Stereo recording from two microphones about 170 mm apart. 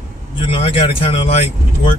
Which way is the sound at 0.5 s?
35° left (ahead or behind).